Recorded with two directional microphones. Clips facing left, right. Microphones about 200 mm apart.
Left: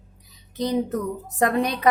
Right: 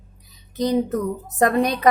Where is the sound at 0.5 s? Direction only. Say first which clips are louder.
Right 4 dB; 40° right (ahead or behind).